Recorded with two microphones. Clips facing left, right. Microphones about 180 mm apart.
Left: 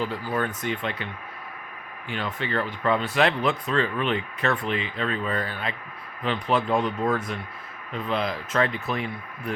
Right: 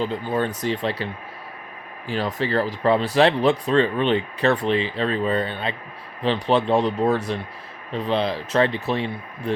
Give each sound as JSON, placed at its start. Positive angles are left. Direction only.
{"t": 0.0, "sound": "speech", "side_deg": -25}